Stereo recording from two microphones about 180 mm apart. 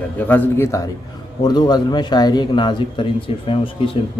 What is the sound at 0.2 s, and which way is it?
A man's voice, 10° left (ahead or behind).